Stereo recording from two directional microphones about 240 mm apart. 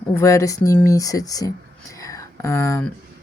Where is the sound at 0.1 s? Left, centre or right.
Centre.